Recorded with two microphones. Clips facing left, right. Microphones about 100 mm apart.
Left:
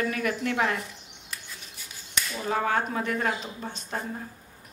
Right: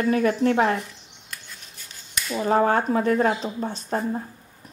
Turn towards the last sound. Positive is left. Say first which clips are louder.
# right 8 dB
turn(degrees=-35)  # may be behind; listen again after turning